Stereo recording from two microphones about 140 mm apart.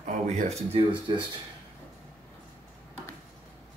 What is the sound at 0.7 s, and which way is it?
Speech, 35° right (ahead or behind).